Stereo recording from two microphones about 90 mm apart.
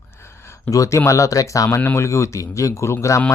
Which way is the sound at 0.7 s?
35° left (ahead or behind).